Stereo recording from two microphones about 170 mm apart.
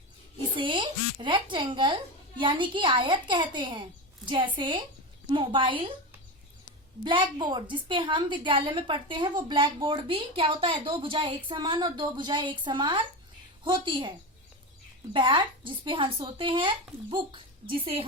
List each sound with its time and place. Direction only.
0.5 s a woman's voice: 30° right (ahead or behind)
7.0 s a woman's voice: 30° right (ahead or behind)
15.1 s a woman's voice: 30° right (ahead or behind)